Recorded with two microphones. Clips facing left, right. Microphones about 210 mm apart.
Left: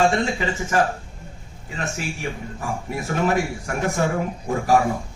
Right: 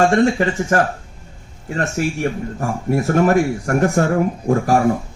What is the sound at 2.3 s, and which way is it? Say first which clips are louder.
Speech: right 7 dB; 45° right (ahead or behind).